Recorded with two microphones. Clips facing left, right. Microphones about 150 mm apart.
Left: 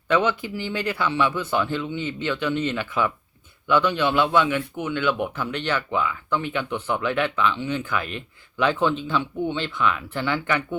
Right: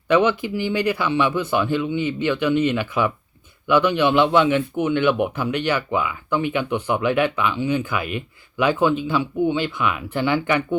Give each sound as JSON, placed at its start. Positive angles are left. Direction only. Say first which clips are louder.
{"t": 0.1, "sound": "a man's voice", "louder": "right 4 dB", "side_deg": -15}